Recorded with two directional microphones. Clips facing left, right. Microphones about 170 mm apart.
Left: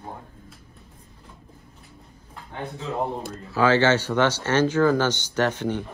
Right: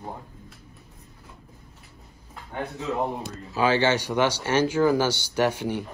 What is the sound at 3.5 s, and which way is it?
Speech, 15° right (ahead or behind).